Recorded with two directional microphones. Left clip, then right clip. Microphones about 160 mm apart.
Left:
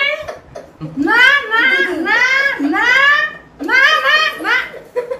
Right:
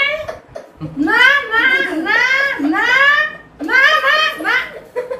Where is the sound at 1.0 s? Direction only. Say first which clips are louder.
Left 1 dB; 65° left (ahead or behind).